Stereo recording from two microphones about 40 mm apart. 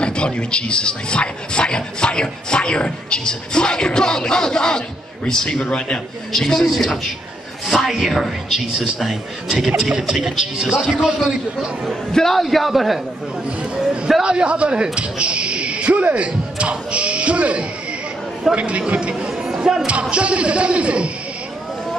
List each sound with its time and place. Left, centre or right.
0.0 s speech: left
6.3 s a man's voice: centre
9.8 s a man's voice: centre
12.1 s a man's voice: centre
14.2 s speech: right
19.5 s music: right
19.9 s speech: right